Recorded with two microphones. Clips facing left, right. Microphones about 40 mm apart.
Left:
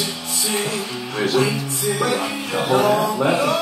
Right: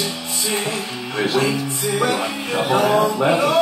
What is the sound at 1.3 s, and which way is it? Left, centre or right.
Music, centre.